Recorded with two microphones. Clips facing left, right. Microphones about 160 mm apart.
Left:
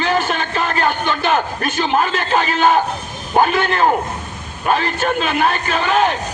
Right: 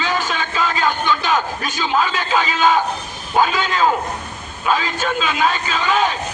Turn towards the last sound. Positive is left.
turn(degrees=60)  # may be behind; listen again after turning